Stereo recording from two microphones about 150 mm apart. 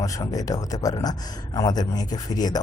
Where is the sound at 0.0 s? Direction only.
25° left (ahead or behind).